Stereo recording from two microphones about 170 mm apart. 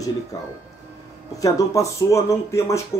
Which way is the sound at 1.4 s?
20° left (ahead or behind).